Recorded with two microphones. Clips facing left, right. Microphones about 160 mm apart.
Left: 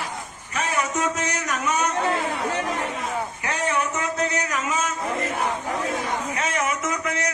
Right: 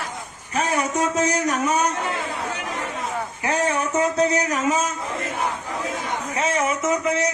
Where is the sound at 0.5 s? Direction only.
35° right (ahead or behind).